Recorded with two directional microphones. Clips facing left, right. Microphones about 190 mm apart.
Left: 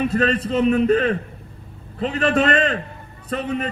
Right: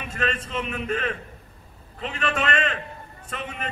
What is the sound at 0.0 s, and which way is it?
A man's voice, 35° left (ahead or behind).